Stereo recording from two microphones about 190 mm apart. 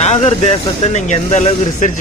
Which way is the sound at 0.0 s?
35° left (ahead or behind).